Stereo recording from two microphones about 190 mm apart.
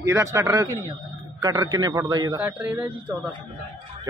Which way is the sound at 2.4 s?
5° right (ahead or behind).